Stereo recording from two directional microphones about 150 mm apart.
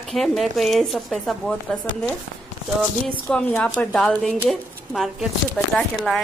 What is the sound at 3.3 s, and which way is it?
A woman's voice, 10° left (ahead or behind).